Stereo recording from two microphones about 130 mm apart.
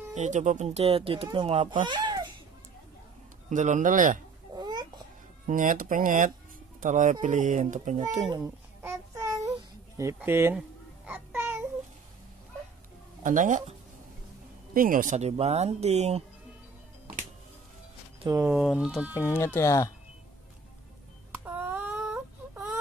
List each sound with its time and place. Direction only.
0.1 s speech: 65° right (ahead or behind); by 1.8 s 45° right (ahead or behind)
1.9 s a sound: 35° right (ahead or behind)
3.4 s speech: 70° right (ahead or behind); by 4.2 s 90° right
4.6 s babbling: 30° right (ahead or behind)
5.5 s speech: 90° right
6.8 s speech: 75° right (ahead or behind)
8.8 s child singing: 25° right (ahead or behind)
9.9 s speech: 20° right (ahead or behind)
11.1 s a sound: 15° right (ahead or behind)
13.2 s speech: 85° right
14.7 s speech: 90° right; by 16.3 s 55° right (ahead or behind)
18.5 s speech: 5° right (ahead or behind)
19.1 s speech: 20° left (ahead or behind)
21.5 s a sound: 15° right (ahead or behind)